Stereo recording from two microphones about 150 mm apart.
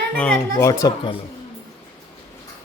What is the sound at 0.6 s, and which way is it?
Speech, 20° left (ahead or behind).